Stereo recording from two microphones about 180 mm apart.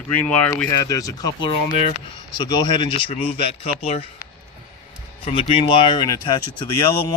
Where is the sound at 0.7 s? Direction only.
20° left (ahead or behind).